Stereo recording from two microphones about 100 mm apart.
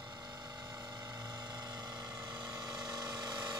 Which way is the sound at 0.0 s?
45° right (ahead or behind).